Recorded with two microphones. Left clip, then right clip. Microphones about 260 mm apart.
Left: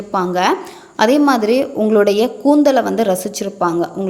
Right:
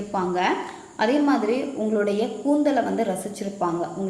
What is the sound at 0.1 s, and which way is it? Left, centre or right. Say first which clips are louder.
A woman's voice: left 8 dB; left.